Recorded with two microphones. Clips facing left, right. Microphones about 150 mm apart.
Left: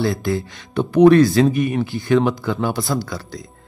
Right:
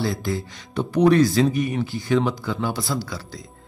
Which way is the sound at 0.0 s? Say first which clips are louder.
Left 5 dB; 60° left (ahead or behind).